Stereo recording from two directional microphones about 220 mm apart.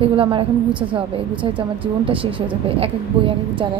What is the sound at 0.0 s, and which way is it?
A woman's voice, 25° right (ahead or behind).